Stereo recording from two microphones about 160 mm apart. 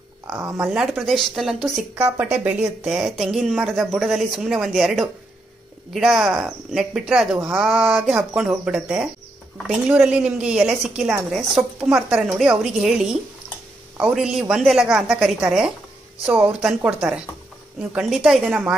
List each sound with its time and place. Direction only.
0.3 s speech: 10° right (ahead or behind)
0.7 s speech: centre (ahead or behind)